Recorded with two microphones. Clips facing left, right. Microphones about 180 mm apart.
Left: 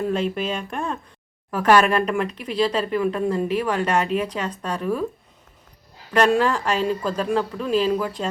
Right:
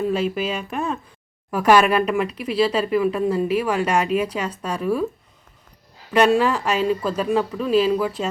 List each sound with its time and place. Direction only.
0.0 s speech: 5° right (ahead or behind)
6.1 s speech: 5° right (ahead or behind)